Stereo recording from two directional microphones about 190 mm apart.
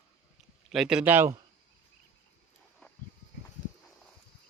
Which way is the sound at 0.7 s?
5° right (ahead or behind).